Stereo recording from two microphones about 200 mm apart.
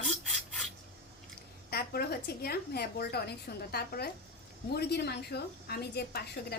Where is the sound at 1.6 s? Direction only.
50° left (ahead or behind).